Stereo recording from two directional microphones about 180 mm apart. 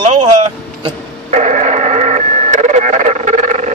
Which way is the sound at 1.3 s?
40° right (ahead or behind).